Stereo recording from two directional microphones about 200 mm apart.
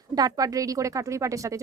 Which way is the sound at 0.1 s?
20° right (ahead or behind).